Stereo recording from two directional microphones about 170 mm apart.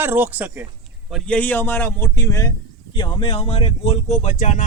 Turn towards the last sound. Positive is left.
turn(degrees=45)  # may be behind; listen again after turning